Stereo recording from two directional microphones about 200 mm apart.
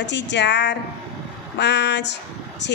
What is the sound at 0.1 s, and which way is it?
A woman's voice, 60° left (ahead or behind).